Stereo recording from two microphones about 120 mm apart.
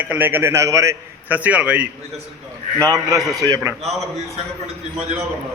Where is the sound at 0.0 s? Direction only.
15° right (ahead or behind).